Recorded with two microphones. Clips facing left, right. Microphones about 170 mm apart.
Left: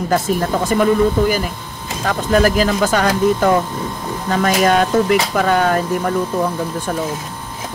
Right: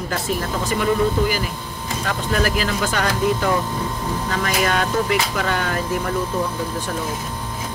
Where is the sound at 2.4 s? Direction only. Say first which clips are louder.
Left 7 dB; 40° left (ahead or behind).